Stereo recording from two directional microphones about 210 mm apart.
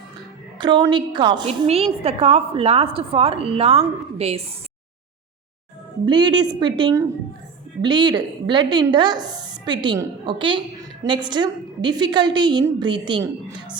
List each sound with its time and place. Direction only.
0.6 s a woman's voice: 20° right (ahead or behind)
6.1 s a woman's voice: 20° right (ahead or behind)